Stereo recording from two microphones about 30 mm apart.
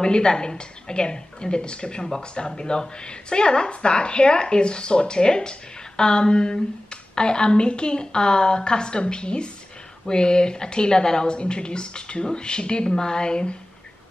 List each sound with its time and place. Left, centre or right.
0.0 s a woman's voice: left